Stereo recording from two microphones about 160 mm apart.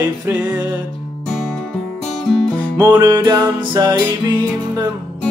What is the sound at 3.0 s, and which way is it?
Music, 20° right (ahead or behind).